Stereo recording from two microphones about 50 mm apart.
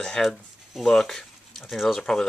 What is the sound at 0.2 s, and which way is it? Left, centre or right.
Speech, centre.